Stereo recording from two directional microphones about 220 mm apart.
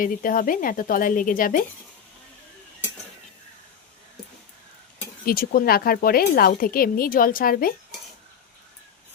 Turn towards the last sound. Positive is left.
turn(degrees=40)  # may be behind; listen again after turning